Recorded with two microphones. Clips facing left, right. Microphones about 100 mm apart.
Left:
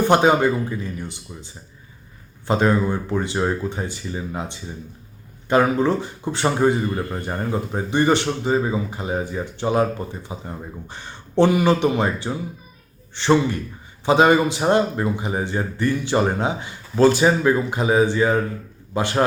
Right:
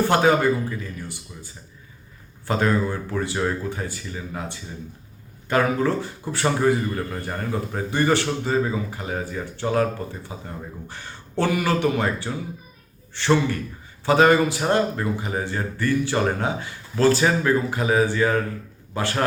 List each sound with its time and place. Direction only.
0.1 s a man's voice: 20° left (ahead or behind)